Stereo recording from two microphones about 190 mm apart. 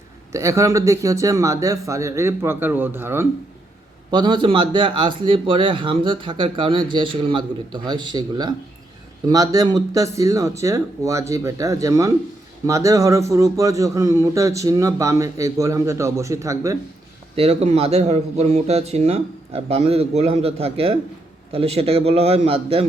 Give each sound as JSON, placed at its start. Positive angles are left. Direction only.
{"t": 0.3, "sound": "a man's voice", "side_deg": -15}
{"t": 4.1, "sound": "a man's voice", "side_deg": -25}
{"t": 17.3, "sound": "speech", "side_deg": -35}